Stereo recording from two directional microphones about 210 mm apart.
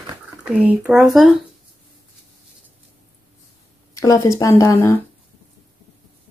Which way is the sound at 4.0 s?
15° left (ahead or behind).